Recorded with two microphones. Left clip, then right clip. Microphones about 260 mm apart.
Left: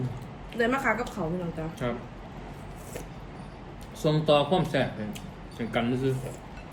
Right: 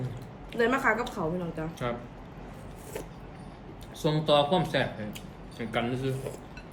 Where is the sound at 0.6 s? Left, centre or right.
Centre.